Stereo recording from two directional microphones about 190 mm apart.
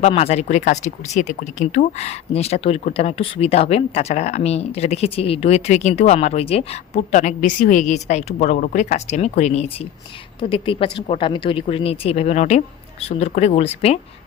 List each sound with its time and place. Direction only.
0.0 s speech: 35° left (ahead or behind)